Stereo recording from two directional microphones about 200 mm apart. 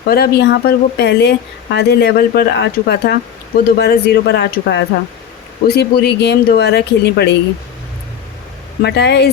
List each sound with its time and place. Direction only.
0.1 s speech: 55° left (ahead or behind)
8.8 s speech: 55° left (ahead or behind)